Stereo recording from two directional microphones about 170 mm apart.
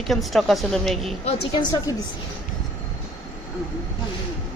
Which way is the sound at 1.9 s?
20° left (ahead or behind).